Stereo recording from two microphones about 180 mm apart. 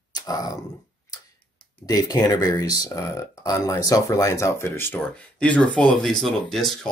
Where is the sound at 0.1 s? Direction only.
20° left (ahead or behind).